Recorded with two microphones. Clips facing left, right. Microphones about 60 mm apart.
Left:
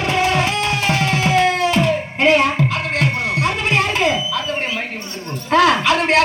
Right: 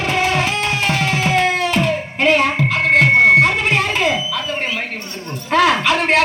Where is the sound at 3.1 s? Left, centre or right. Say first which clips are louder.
Right 10 dB; right.